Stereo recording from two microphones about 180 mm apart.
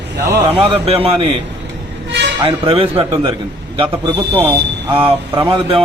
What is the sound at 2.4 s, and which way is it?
A man's voice, 30° right (ahead or behind).